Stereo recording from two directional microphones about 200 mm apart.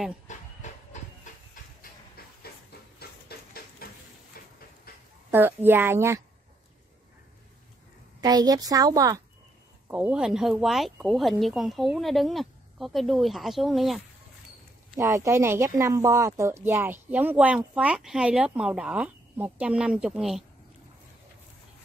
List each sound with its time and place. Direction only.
0.3 s train: 35° left (ahead or behind)
1.5 s steam: 45° left (ahead or behind)
3.0 s a sound: 50° left (ahead or behind)
5.3 s speech: 10° right (ahead or behind)
8.2 s a woman's voice: 20° right (ahead or behind)
9.8 s speech: 5° right (ahead or behind)
15.0 s speech: 15° right (ahead or behind)